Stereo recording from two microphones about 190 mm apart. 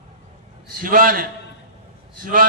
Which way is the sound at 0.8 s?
50° right (ahead or behind).